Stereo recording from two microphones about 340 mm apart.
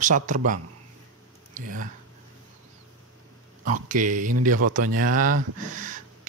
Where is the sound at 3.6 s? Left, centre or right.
Right.